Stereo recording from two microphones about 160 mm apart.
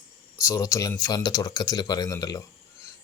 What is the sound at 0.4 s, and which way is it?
Speech, 20° left (ahead or behind).